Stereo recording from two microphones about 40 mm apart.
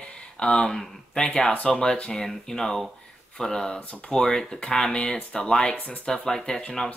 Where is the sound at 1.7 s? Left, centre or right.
Centre.